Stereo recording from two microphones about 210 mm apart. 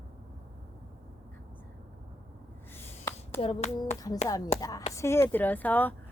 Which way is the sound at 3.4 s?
25° left (ahead or behind).